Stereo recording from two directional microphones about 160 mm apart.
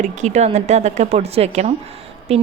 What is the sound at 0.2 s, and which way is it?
A woman's voice, 45° right (ahead or behind).